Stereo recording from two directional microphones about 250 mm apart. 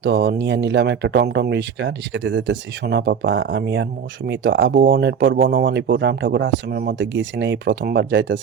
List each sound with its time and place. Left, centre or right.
0.0 s speech: right
4.7 s speech: right
4.9 s speech: right